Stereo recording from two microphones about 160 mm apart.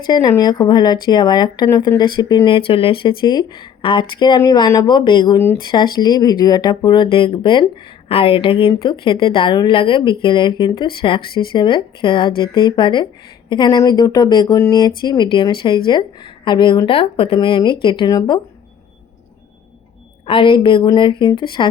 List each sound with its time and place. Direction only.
0.1 s a woman's voice: 25° left (ahead or behind)
20.2 s a woman's voice: 30° left (ahead or behind)